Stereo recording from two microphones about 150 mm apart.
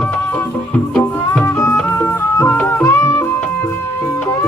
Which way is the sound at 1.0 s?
5° left (ahead or behind).